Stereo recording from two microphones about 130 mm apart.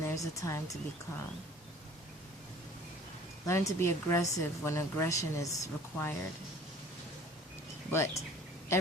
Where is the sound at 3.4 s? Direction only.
25° left (ahead or behind).